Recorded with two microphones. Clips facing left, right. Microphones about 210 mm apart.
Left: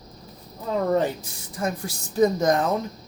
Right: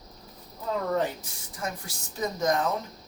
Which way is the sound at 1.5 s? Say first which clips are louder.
Left 8 dB; 35° left (ahead or behind).